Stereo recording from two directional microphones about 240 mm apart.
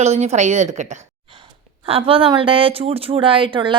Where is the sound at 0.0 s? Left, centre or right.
Right.